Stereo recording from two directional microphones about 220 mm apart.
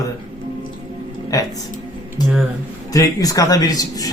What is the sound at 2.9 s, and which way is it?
A man's voice, 15° left (ahead or behind).